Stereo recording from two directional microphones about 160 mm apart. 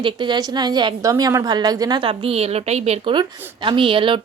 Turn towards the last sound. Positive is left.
turn(degrees=-30)  # may be behind; listen again after turning